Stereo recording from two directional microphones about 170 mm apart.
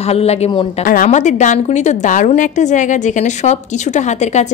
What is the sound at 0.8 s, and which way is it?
A woman's voice, 50° left (ahead or behind).